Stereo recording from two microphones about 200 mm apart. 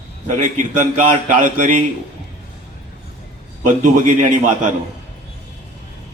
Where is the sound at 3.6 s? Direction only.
40° right (ahead or behind).